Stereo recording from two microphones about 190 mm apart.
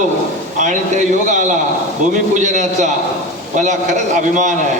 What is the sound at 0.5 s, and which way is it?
A man's voice, 40° right (ahead or behind).